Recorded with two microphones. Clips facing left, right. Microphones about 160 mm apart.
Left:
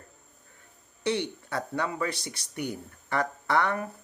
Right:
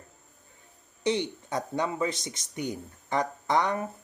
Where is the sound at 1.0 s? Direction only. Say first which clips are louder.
Right 1 dB; 20° right (ahead or behind).